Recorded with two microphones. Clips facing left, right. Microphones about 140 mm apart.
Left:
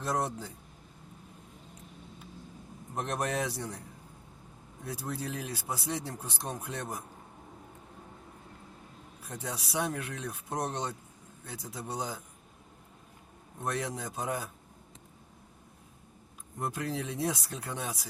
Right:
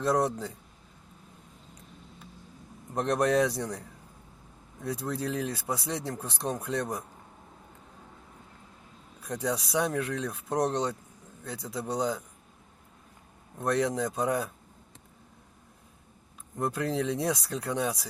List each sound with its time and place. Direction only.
0.0 s speech: 75° right (ahead or behind)
2.9 s speech: 75° right (ahead or behind)
9.2 s speech: 75° right (ahead or behind)
13.7 s speech: 75° right (ahead or behind)
16.6 s speech: 75° right (ahead or behind)